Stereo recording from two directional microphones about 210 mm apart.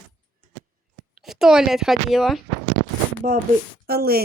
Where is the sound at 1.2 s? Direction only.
Centre (ahead or behind).